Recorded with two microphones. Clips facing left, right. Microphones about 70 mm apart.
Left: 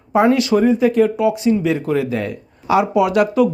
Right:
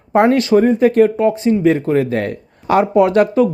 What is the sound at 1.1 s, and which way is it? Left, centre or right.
Speech, right.